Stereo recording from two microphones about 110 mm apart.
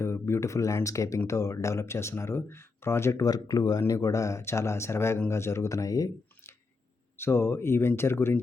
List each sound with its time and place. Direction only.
0.0 s speech: 25° left (ahead or behind)